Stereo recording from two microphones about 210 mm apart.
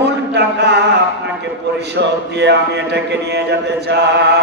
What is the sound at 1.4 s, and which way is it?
A man's voice, 55° right (ahead or behind).